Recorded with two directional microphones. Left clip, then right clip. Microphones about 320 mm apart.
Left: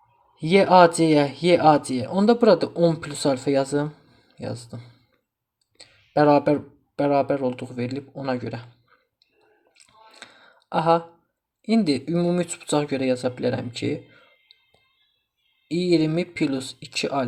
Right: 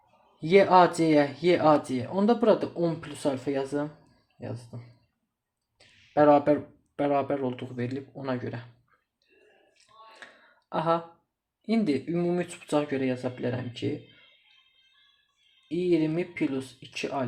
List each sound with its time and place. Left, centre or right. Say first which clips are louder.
0.3 s speech: left 4 dB; centre
10.2 s clicking: left 4 dB; centre
10.7 s speech: left 7 dB; centre
15.7 s speech: left 5 dB; left